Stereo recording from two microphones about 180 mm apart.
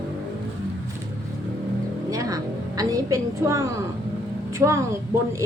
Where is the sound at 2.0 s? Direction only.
20° right (ahead or behind).